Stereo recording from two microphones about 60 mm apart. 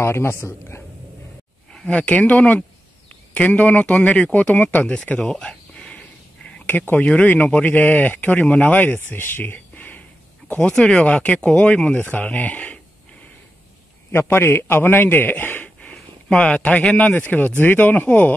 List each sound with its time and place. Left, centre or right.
0.0 s a man's voice: left
1.7 s speech: centre
4.8 s a sound: centre
7.3 s speech: left
12.0 s a sound: left
14.1 s a man's voice: left
15.8 s speech: centre